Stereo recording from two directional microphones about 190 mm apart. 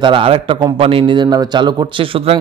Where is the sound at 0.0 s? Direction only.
25° right (ahead or behind).